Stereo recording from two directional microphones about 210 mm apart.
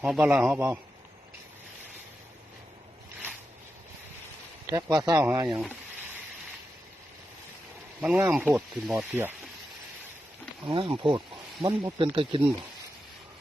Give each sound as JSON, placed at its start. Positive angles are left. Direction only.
{"t": 0.0, "sound": "a man's voice", "side_deg": -5}
{"t": 4.6, "sound": "speech", "side_deg": -15}
{"t": 8.0, "sound": "speech", "side_deg": -10}
{"t": 10.7, "sound": "speech", "side_deg": -20}